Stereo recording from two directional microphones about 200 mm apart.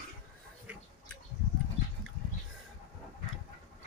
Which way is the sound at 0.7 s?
10° right (ahead or behind).